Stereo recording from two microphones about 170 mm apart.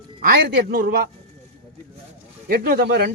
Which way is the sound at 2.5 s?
65° right (ahead or behind).